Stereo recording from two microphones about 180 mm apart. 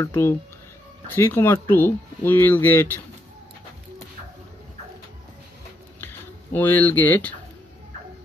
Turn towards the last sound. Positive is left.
turn(degrees=10)  # may be behind; listen again after turning